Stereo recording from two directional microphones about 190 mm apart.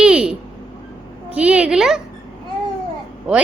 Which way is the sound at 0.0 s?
5° right (ahead or behind).